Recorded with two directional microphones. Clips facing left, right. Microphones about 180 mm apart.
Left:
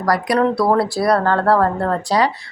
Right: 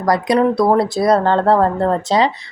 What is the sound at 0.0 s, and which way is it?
A woman's voice, 20° right (ahead or behind).